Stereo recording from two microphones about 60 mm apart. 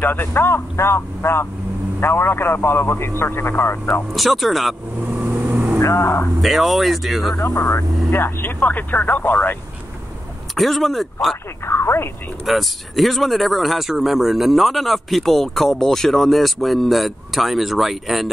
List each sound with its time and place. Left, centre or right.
0.0 s a man's voice: left
4.1 s speech: centre
5.2 s vehicle: right
5.8 s speech: left
6.4 s speech: centre
7.3 s speech: left
8.1 s a man's voice: left
10.5 s speech: centre
11.6 s speech: left
12.4 s speech: centre